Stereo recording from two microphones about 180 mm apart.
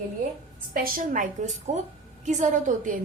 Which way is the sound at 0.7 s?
50° right (ahead or behind).